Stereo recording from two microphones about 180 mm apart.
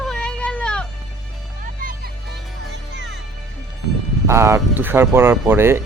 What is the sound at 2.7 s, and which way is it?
Music, 80° right.